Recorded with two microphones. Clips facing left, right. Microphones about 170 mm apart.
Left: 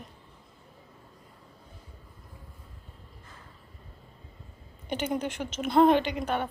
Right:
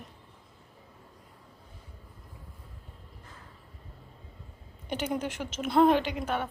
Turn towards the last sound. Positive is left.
turn(degrees=0)  # may be behind; listen again after turning